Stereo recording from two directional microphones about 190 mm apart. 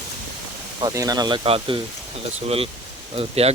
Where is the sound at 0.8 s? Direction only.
20° right (ahead or behind).